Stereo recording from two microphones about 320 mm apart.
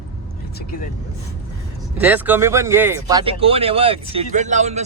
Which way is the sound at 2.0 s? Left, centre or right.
Centre.